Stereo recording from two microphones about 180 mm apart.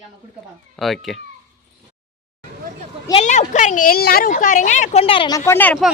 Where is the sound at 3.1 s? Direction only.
40° left (ahead or behind); by 5.8 s 10° left (ahead or behind).